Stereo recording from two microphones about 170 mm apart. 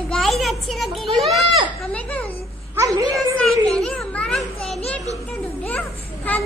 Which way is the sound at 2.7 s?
20° right (ahead or behind).